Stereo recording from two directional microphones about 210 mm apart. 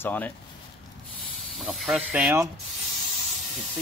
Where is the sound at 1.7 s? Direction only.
5° right (ahead or behind).